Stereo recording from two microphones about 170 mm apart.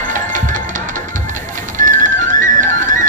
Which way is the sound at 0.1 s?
50° right (ahead or behind).